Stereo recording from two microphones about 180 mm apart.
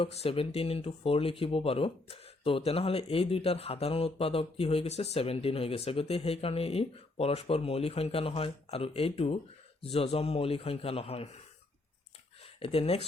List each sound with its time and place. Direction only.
0.0 s speech: 30° left (ahead or behind)
12.5 s speech: 35° left (ahead or behind)